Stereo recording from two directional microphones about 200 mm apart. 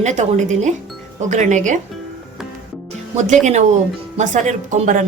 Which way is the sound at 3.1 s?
35° right (ahead or behind).